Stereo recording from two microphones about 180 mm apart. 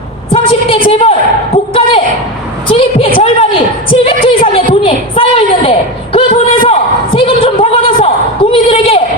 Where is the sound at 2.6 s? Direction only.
30° left (ahead or behind).